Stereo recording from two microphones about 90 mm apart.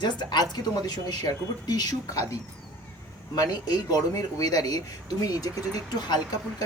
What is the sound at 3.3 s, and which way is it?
Speech, 45° left (ahead or behind).